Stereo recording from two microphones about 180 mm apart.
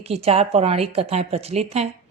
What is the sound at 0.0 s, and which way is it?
A woman's voice, 35° right (ahead or behind).